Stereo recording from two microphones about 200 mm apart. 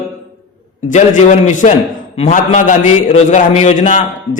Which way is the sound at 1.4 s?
35° left (ahead or behind).